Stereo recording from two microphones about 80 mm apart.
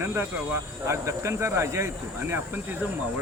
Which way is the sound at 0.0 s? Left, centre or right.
Right.